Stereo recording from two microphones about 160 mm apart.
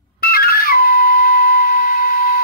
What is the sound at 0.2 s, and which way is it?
Dog, 70° left (ahead or behind).